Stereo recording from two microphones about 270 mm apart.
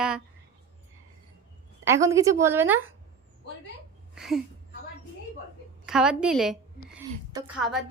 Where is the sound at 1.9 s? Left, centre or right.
Centre.